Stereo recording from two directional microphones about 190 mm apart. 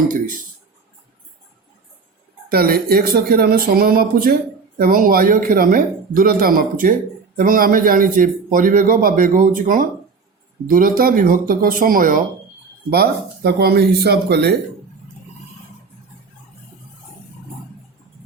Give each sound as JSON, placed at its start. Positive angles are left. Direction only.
{"t": 2.5, "sound": "a man's voice", "side_deg": -55}